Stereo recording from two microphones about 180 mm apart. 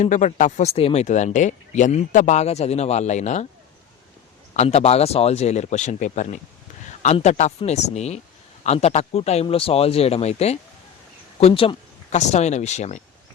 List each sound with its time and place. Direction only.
0.0 s speech: 40° left (ahead or behind)
4.5 s speech: 35° left (ahead or behind)